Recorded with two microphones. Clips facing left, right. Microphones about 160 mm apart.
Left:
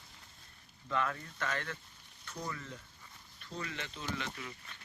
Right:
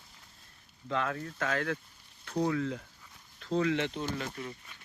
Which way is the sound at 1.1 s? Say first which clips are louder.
Right 5 dB; 85° right.